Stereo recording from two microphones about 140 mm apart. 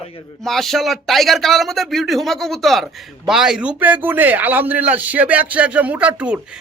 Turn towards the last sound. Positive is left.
turn(degrees=-10)  # may be behind; listen again after turning